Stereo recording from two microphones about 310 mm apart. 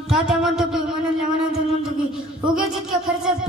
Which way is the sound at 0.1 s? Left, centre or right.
Centre.